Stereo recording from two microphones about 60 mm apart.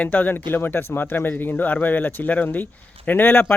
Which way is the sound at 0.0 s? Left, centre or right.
Left.